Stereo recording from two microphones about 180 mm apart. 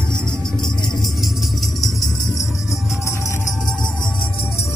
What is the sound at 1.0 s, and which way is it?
Music, centre (ahead or behind).